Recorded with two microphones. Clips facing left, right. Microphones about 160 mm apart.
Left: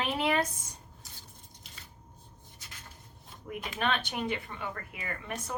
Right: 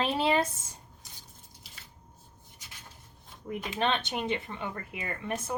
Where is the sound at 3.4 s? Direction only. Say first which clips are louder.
Right 3 dB; 25° right (ahead or behind).